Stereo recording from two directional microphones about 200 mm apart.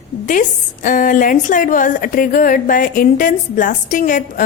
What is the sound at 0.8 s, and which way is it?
Speech, 40° left (ahead or behind).